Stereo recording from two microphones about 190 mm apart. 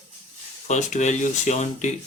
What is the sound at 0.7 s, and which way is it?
Speech, 40° left (ahead or behind).